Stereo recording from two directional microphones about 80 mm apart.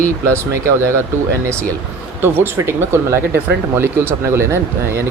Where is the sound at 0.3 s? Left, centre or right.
Right.